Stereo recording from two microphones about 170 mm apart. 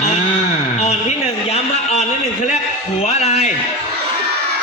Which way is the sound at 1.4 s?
40° left (ahead or behind).